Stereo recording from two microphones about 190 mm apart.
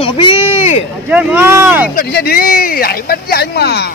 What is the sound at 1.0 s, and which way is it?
Speech, 10° right (ahead or behind).